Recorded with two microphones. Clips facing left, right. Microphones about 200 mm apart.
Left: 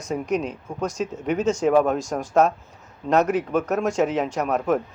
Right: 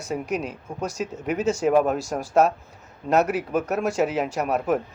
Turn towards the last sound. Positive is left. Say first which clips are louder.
# left 1 dB
turn(degrees=-10)  # may be behind; listen again after turning